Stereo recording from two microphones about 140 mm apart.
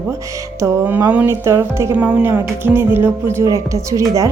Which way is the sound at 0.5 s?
15° right (ahead or behind).